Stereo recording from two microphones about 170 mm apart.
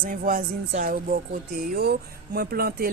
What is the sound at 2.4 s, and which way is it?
Speech, 65° right (ahead or behind).